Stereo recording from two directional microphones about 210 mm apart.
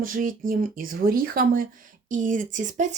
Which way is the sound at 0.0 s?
40° right (ahead or behind).